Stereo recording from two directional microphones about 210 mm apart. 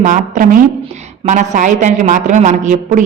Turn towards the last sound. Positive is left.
turn(degrees=-35)  # may be behind; listen again after turning